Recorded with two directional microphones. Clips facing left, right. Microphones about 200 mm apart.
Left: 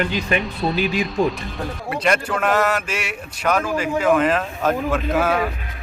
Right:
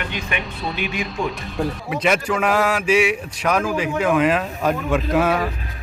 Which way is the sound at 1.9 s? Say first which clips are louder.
Even; 5° right (ahead or behind).